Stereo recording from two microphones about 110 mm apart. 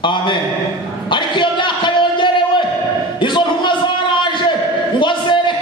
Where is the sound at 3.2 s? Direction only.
45° left (ahead or behind).